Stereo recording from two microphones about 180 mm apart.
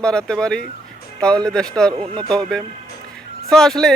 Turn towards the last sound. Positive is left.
turn(degrees=5)  # may be behind; listen again after turning